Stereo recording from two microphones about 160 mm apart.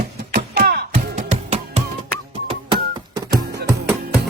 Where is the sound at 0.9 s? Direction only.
45° right (ahead or behind).